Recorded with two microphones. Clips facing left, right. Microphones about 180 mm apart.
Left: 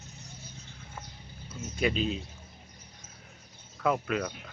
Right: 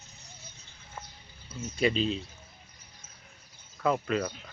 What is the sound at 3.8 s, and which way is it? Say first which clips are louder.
Speech: right 1 dB; 5° left (ahead or behind).